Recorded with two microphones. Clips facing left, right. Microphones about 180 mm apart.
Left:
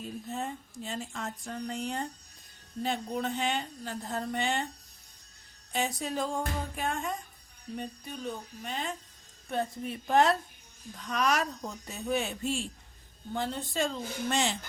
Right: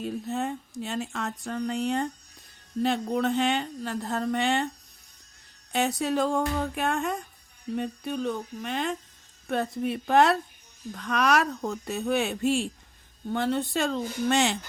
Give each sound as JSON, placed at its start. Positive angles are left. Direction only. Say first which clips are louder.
{"t": 0.0, "sound": "speech", "louder": "right 6 dB", "side_deg": -75}
{"t": 5.7, "sound": "speech", "louder": "right 6 dB", "side_deg": -70}